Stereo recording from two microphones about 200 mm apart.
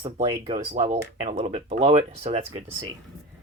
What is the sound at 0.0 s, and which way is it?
Speech, 25° right (ahead or behind).